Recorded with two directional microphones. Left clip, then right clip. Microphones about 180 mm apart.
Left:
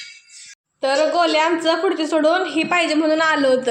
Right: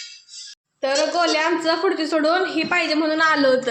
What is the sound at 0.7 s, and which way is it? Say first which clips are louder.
A woman's voice: left 3 dB; 5° left (ahead or behind).